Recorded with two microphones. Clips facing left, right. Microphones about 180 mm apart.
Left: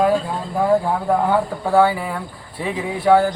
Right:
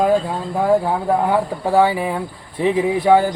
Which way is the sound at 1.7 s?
20° right (ahead or behind).